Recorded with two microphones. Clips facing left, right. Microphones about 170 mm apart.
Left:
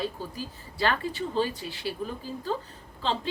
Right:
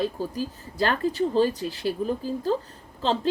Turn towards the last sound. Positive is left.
turn(degrees=-40)  # may be behind; listen again after turning